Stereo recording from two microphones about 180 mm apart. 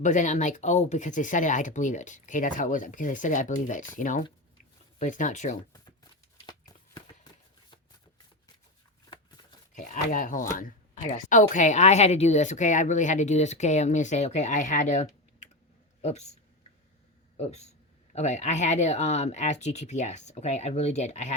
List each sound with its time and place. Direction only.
0.0 s speech: 45° left (ahead or behind)
9.7 s a sound: 45° left (ahead or behind)
10.6 s a man's voice: 45° left (ahead or behind)
17.3 s speech: 35° left (ahead or behind)